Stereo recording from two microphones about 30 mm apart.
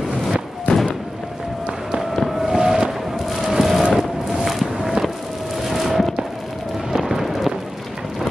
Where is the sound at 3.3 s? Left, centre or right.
Centre.